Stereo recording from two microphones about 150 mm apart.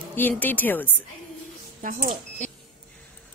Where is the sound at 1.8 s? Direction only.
65° right (ahead or behind).